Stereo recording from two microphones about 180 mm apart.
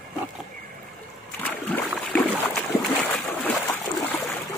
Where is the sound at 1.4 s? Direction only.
5° left (ahead or behind).